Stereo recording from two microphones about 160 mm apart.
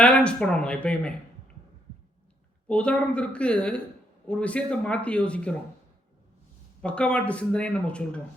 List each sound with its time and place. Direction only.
0.0 s speech: 5° left (ahead or behind)
2.6 s speech: 5° left (ahead or behind)
6.8 s speech: 5° left (ahead or behind)